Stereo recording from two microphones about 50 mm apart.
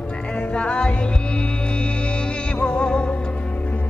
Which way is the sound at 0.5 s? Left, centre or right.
Left.